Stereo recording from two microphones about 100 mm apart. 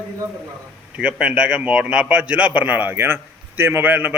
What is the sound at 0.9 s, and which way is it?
A man's voice, 10° right (ahead or behind).